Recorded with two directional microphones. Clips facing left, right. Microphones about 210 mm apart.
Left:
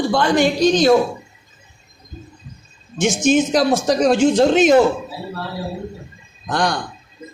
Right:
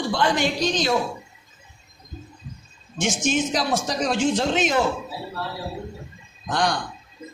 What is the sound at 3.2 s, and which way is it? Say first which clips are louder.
A man's voice: left 9 dB; 45° left (ahead or behind).